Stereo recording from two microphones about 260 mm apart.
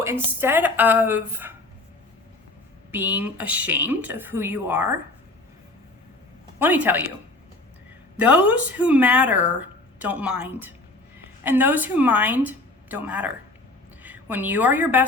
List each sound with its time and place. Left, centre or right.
0.0 s a woman's voice: centre
2.9 s a woman's voice: centre
6.6 s a woman's voice: centre
8.1 s a woman's voice: centre